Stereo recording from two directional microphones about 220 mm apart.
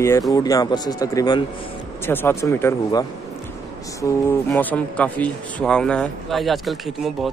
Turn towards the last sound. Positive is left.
turn(degrees=0)  # may be behind; listen again after turning